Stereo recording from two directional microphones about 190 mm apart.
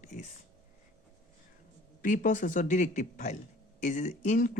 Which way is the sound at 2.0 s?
45° left (ahead or behind).